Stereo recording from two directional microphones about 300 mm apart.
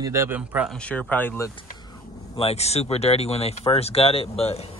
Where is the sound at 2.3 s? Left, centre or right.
Centre.